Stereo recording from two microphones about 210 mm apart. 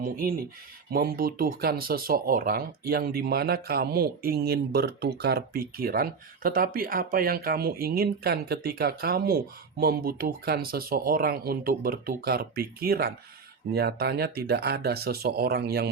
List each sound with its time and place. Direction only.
0.0 s speech: 45° right (ahead or behind)